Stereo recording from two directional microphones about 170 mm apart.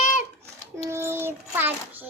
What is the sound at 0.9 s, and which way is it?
A child's voice, 15° right (ahead or behind).